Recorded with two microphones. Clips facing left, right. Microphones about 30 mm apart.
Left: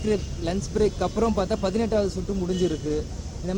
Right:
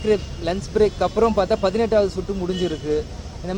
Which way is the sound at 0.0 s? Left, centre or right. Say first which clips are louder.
Right 5 dB; right.